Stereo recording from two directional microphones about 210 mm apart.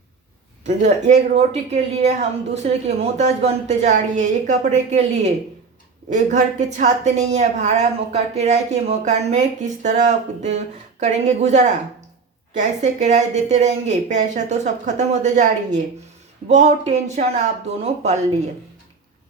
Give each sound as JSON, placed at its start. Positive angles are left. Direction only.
{"t": 0.6, "sound": "a woman's voice", "side_deg": -35}
{"t": 11.0, "sound": "a woman's voice", "side_deg": -35}